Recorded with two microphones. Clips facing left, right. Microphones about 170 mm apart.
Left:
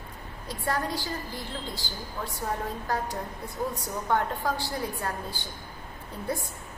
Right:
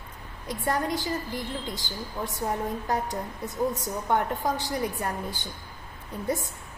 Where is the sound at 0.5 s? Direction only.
20° right (ahead or behind).